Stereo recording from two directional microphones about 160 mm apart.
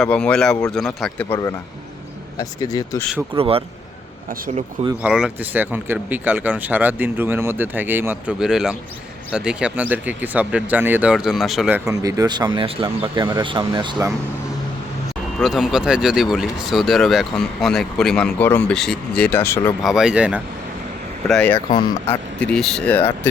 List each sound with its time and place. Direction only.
0.0 s speech: 5° left (ahead or behind)
2.4 s speech: 20° left (ahead or behind)
3.3 s a man's voice: 35° right (ahead or behind)
4.3 s speech: 60° right (ahead or behind)
5.0 s speech: 5° right (ahead or behind)
11.9 s speech: 20° right (ahead or behind)
15.4 s speech: centre (ahead or behind); by 19.7 s 15° left (ahead or behind)
19.8 s speech: centre (ahead or behind)
21.2 s speech: 5° left (ahead or behind)